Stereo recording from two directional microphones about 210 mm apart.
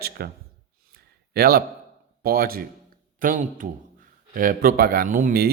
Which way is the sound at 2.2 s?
45° right (ahead or behind).